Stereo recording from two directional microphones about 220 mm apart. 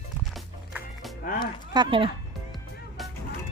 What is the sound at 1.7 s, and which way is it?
Speech, 20° right (ahead or behind).